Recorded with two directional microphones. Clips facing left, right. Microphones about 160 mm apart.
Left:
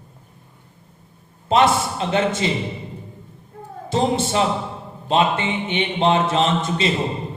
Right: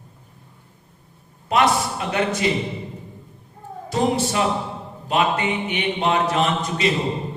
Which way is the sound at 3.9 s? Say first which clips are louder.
Left 1 dB; 25° left (ahead or behind).